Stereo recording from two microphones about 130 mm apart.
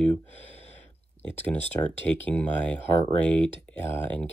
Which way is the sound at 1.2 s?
15° left (ahead or behind).